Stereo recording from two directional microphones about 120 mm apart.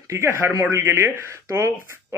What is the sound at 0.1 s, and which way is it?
Speech, 20° right (ahead or behind).